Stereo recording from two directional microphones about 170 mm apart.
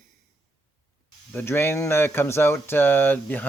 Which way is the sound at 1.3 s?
10° left (ahead or behind).